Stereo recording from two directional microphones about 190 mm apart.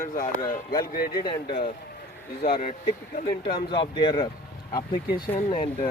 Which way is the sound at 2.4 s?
35° left (ahead or behind).